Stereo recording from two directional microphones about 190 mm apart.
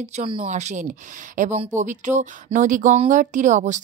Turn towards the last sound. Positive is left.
turn(degrees=-40)  # may be behind; listen again after turning